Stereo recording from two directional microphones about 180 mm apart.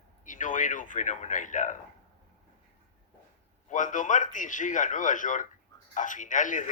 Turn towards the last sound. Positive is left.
turn(degrees=45)  # may be behind; listen again after turning